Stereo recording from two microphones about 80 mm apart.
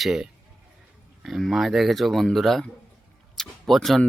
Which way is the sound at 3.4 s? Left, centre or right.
Centre.